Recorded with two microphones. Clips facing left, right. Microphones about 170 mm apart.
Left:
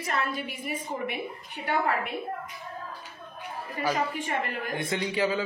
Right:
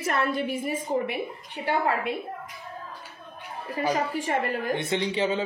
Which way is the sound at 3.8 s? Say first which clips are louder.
Right 2 dB; 30° right (ahead or behind).